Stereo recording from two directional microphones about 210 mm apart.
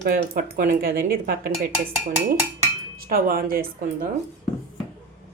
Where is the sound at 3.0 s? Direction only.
45° right (ahead or behind).